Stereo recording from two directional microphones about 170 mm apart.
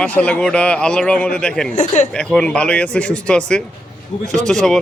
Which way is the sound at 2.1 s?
5° left (ahead or behind).